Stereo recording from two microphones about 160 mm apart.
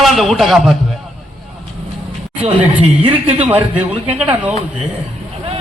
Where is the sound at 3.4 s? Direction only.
10° right (ahead or behind).